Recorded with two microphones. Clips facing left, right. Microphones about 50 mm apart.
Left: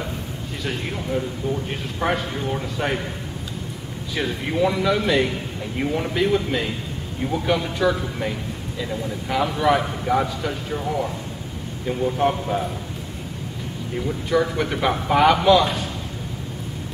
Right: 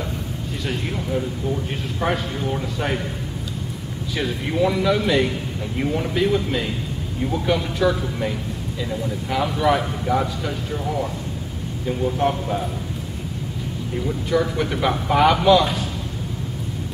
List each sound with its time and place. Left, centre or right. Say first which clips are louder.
0.7 s speech: even; centre
4.1 s speech: even; centre
13.9 s speech: even; centre